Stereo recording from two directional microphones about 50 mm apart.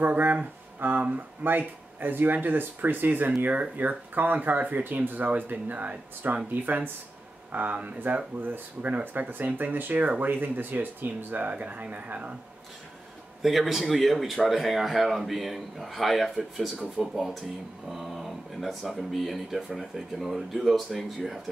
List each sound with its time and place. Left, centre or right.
0.0 s speech: right
9.3 s speech: right
13.4 s speech: centre